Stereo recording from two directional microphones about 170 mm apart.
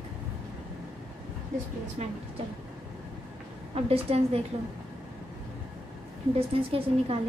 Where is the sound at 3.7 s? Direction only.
35° right (ahead or behind).